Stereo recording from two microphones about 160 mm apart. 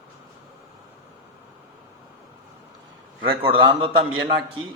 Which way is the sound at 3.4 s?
35° right (ahead or behind).